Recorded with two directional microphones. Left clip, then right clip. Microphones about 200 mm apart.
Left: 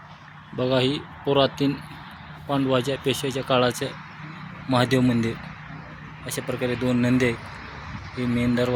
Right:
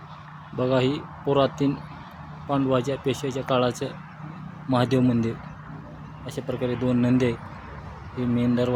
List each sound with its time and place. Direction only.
0.5 s speech: centre (ahead or behind)